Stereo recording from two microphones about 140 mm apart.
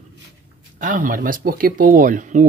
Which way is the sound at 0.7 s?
70° right (ahead or behind).